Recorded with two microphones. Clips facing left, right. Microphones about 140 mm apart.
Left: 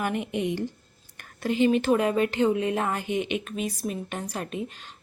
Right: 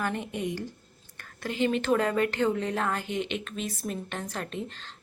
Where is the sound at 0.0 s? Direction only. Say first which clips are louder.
Left 3 dB; 15° left (ahead or behind).